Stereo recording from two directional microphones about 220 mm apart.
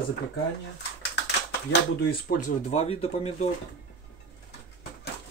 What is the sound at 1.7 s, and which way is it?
Speech, 40° left (ahead or behind).